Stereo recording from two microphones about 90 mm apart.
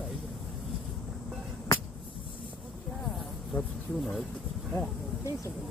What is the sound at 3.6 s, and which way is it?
Speech, 5° left (ahead or behind).